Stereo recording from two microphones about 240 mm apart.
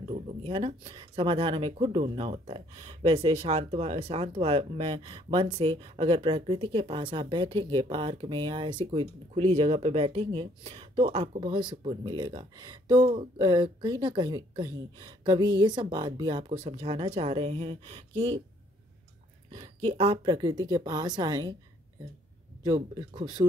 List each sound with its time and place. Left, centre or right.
0.5 s speech: right
19.9 s speech: right
22.6 s speech: centre